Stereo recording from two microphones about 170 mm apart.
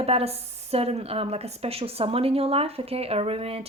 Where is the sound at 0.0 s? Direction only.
35° right (ahead or behind).